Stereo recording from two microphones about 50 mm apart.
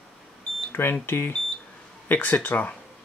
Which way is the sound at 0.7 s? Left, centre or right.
Left.